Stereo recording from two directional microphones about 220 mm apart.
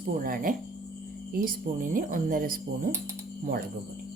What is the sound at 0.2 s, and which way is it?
Speech, 40° right (ahead or behind).